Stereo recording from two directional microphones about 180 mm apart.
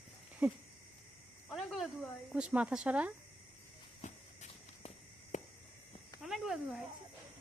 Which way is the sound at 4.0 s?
40° left (ahead or behind).